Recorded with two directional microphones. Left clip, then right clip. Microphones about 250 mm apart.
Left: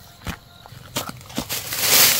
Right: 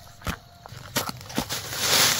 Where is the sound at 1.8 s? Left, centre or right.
Centre.